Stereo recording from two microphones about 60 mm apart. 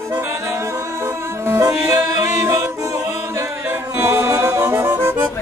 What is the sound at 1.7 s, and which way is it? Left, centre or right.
Music, right.